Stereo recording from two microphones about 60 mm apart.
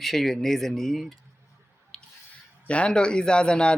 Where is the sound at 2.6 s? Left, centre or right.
Centre.